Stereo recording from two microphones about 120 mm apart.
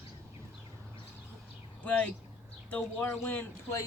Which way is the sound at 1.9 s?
10° left (ahead or behind).